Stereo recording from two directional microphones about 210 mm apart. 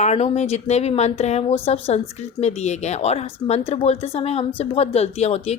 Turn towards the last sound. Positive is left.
turn(degrees=30)  # may be behind; listen again after turning